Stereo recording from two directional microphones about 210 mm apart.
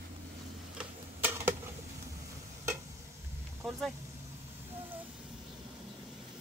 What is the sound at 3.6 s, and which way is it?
Vehicle, centre (ahead or behind).